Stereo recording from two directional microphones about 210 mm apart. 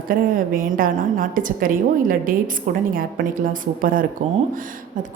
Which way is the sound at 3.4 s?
40° right (ahead or behind).